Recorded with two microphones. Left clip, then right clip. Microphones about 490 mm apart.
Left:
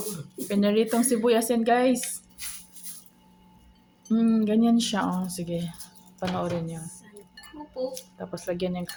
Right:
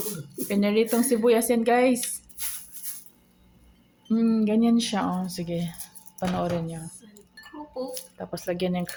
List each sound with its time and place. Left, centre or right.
0.4 s speech: right
4.1 s speech: right